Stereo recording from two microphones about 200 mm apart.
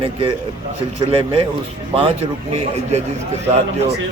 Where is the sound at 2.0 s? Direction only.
30° right (ahead or behind).